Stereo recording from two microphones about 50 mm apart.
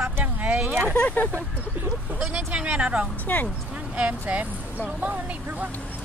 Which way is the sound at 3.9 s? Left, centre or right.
Right.